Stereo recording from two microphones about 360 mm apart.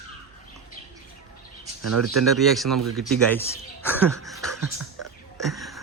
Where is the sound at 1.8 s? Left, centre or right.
Right.